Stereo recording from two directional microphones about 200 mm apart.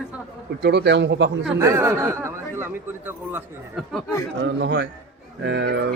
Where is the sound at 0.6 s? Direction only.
55° right (ahead or behind).